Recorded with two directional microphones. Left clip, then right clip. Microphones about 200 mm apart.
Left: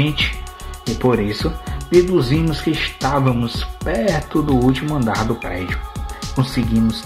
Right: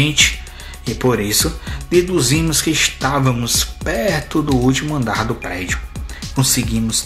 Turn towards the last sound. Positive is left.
turn(degrees=0)  # may be behind; listen again after turning